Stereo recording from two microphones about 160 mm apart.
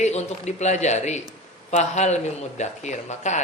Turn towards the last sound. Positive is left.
turn(degrees=45)  # may be behind; listen again after turning